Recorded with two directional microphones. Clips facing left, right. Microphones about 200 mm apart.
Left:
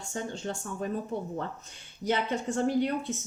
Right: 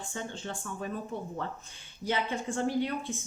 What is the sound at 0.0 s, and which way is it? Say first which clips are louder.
Speech: left 3 dB; 40° left (ahead or behind).